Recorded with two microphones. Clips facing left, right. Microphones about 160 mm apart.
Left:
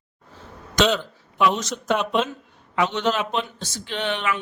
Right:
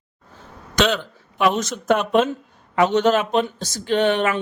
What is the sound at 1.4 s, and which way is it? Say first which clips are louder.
Speech: right 2 dB; 55° right (ahead or behind).